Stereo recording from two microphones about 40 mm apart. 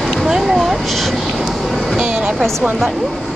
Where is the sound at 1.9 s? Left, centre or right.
Centre.